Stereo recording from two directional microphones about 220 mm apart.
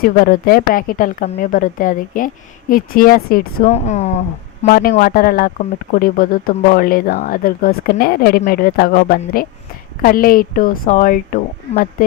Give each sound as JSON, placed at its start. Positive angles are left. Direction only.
{"t": 0.0, "sound": "speech", "side_deg": 40}
{"t": 4.6, "sound": "speech", "side_deg": 40}